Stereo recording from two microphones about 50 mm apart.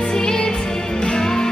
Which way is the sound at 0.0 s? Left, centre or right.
Centre.